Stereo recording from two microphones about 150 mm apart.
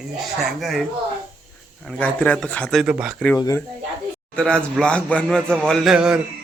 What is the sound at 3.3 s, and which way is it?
Speech, 20° left (ahead or behind).